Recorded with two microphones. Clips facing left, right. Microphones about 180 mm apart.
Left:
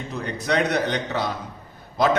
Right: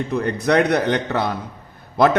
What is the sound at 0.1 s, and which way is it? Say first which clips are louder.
A man's voice: right 5 dB; 60° right (ahead or behind).